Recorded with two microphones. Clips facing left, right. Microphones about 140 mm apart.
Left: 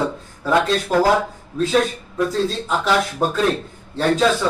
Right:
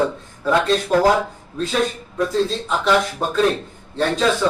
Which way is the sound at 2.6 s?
5° left (ahead or behind).